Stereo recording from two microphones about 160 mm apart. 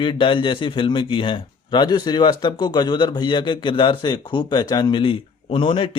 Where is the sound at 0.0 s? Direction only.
30° left (ahead or behind).